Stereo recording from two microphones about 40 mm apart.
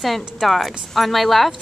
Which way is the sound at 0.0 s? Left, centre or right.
Centre.